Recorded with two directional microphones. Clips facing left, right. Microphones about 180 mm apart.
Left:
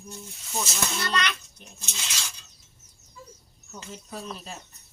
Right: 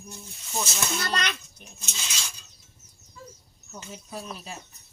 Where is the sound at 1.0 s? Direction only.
45° right (ahead or behind).